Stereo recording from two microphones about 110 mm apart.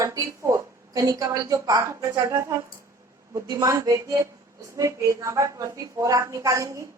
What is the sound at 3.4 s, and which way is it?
A woman's voice, 35° right (ahead or behind).